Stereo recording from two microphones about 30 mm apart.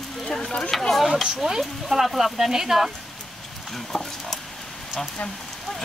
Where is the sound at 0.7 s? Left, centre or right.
Centre.